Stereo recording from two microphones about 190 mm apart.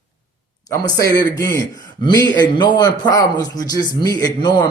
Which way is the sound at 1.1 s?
15° left (ahead or behind).